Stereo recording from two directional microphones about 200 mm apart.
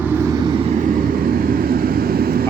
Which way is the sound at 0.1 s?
15° right (ahead or behind).